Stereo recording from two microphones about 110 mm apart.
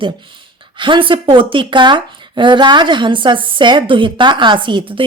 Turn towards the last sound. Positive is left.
turn(degrees=-50)  # may be behind; listen again after turning